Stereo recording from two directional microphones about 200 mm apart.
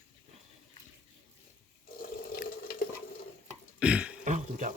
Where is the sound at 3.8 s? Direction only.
5° right (ahead or behind).